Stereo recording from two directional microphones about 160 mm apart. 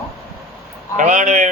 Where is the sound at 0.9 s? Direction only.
50° right (ahead or behind).